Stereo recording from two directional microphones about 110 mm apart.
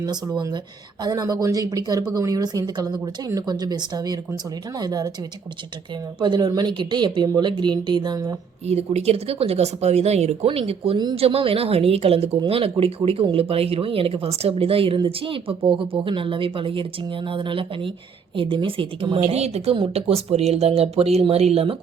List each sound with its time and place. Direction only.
0.0 s a woman's voice: 40° right (ahead or behind)
6.1 s speech: 45° right (ahead or behind)
8.6 s speech: 70° right (ahead or behind); by 19.4 s 55° right (ahead or behind)
19.4 s speech: 75° right (ahead or behind)
19.7 s speech: 60° right (ahead or behind)